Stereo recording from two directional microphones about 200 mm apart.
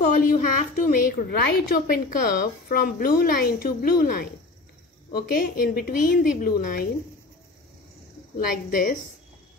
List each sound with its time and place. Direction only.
0.3 s a child's voice: 40° left (ahead or behind)
8.4 s a child's voice: 45° left (ahead or behind)